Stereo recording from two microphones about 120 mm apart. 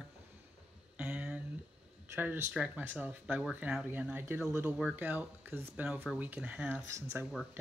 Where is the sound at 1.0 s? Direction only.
10° right (ahead or behind).